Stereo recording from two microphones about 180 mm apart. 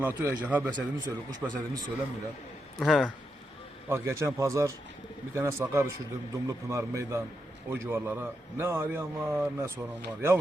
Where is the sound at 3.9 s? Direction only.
15° right (ahead or behind).